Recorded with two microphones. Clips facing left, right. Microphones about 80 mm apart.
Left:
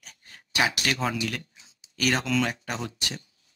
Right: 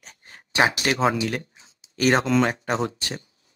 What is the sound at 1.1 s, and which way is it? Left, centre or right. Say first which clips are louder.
Speech: right 5 dB; right.